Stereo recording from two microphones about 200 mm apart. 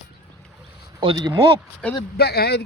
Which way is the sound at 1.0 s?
20° right (ahead or behind).